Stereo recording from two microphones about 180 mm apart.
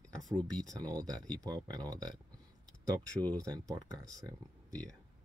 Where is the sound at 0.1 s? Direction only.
Centre (ahead or behind).